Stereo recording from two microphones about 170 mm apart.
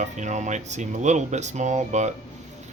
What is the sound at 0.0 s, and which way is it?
Speech, 45° right (ahead or behind).